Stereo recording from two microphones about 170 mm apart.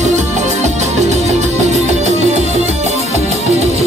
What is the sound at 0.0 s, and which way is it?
Music, 45° right (ahead or behind).